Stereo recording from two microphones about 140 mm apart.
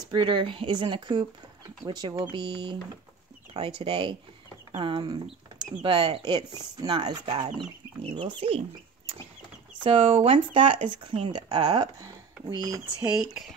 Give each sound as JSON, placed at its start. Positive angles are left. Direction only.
{"t": 0.1, "sound": "speech", "side_deg": -35}
{"t": 8.0, "sound": "speech", "side_deg": -45}
{"t": 9.8, "sound": "speech", "side_deg": -40}
{"t": 13.0, "sound": "speech", "side_deg": -5}